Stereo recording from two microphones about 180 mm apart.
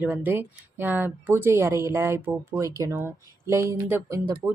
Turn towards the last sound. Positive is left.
turn(degrees=-20)  # may be behind; listen again after turning